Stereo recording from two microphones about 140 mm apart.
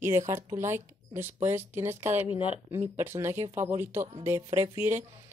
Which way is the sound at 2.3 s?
40° left (ahead or behind).